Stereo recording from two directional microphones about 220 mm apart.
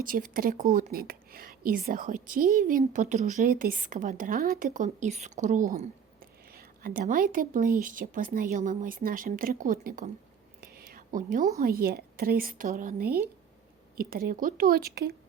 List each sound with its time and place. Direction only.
0.0 s a woman's voice: 40° right (ahead or behind)